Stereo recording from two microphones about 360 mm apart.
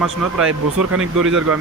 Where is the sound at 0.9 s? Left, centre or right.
Right.